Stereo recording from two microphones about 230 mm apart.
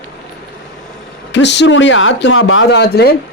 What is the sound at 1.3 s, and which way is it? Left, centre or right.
Speech, left.